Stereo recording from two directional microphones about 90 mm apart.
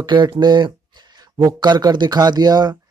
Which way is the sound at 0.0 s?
55° right (ahead or behind).